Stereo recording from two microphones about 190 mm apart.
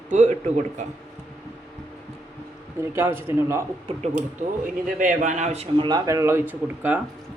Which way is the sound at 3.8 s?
35° right (ahead or behind).